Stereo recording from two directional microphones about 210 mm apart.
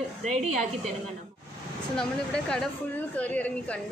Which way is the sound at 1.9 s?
5° left (ahead or behind).